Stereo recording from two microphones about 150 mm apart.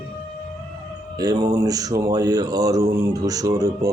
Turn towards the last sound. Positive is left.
turn(degrees=-25)  # may be behind; listen again after turning